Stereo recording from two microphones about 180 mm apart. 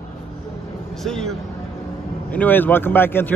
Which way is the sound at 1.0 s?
Centre (ahead or behind).